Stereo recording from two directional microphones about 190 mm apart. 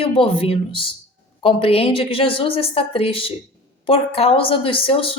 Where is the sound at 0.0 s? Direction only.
30° left (ahead or behind).